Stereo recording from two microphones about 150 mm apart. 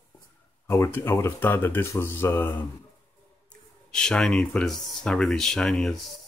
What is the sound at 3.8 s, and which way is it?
Speech, 5° left (ahead or behind).